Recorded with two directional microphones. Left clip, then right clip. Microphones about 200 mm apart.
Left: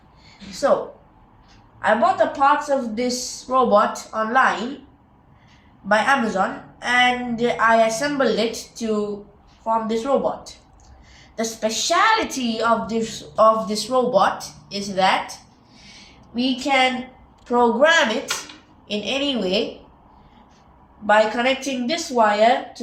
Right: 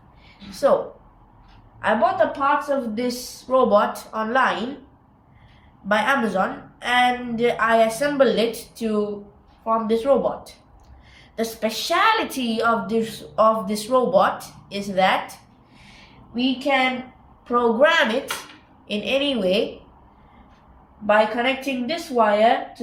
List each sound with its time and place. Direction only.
1.8 s a woman's voice: 15° right (ahead or behind)
5.9 s a woman's voice: 25° right (ahead or behind)
16.3 s a woman's voice: 15° right (ahead or behind)
21.1 s a woman's voice: 15° right (ahead or behind)